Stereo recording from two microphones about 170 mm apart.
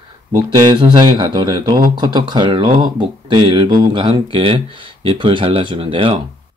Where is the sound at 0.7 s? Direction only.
25° right (ahead or behind).